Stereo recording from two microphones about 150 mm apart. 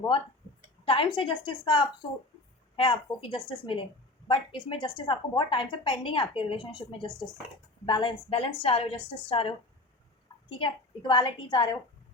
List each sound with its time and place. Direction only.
0.9 s a woman's voice: 35° left (ahead or behind)
10.6 s a woman's voice: 30° left (ahead or behind)